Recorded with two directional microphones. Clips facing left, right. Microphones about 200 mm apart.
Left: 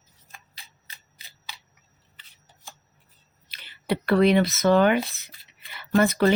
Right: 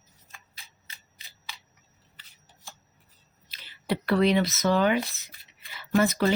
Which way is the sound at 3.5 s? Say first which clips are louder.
Left 2 dB; 60° left (ahead or behind).